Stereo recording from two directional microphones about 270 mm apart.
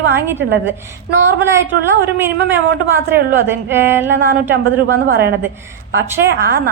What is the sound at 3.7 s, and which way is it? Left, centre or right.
Speech, centre.